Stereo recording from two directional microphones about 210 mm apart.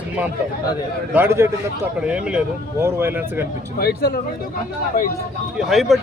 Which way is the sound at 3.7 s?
45° left (ahead or behind).